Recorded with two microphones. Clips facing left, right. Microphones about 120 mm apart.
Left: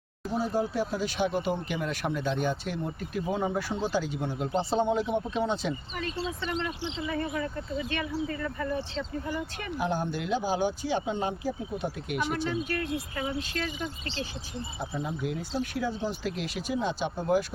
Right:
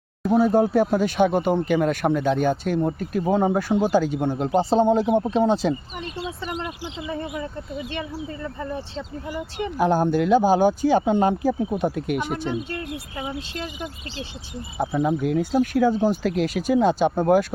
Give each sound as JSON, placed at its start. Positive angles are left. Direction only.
{"t": 0.2, "sound": "speech", "side_deg": -60}
{"t": 6.2, "sound": "speech", "side_deg": -15}
{"t": 7.0, "sound": "speech", "side_deg": -20}
{"t": 9.0, "sound": "speech", "side_deg": -15}
{"t": 9.7, "sound": "speech", "side_deg": -45}
{"t": 12.5, "sound": "speech", "side_deg": -25}
{"t": 14.8, "sound": "speech", "side_deg": -90}
{"t": 15.2, "sound": "speech", "side_deg": -55}